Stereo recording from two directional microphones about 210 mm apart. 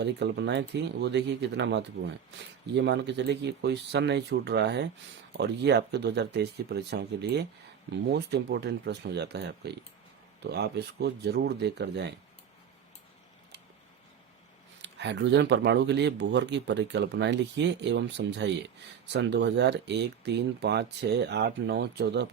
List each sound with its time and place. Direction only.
0.0 s speech: 55° right (ahead or behind)
14.8 s speech: 55° right (ahead or behind)